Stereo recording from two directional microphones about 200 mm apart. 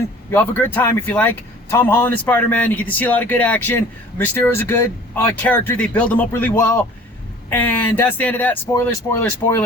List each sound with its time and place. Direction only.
0.3 s speech: 10° left (ahead or behind)